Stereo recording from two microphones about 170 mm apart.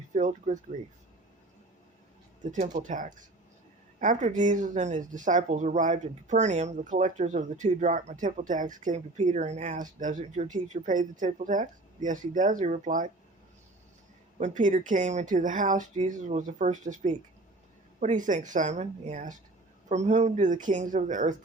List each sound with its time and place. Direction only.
0.1 s speech: 45° right (ahead or behind)
2.4 s speech: 45° right (ahead or behind)
14.3 s speech: 45° right (ahead or behind)